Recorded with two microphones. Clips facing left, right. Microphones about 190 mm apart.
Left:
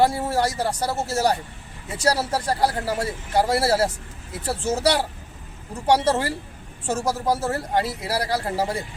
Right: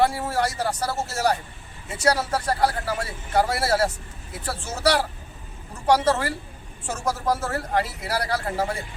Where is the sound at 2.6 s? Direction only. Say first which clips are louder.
Left 2 dB; 30° left (ahead or behind).